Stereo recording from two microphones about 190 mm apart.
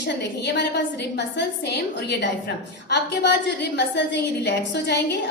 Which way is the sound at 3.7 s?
65° left (ahead or behind).